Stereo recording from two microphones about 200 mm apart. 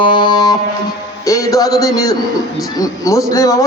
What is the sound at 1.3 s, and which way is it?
A man's voice, 15° left (ahead or behind).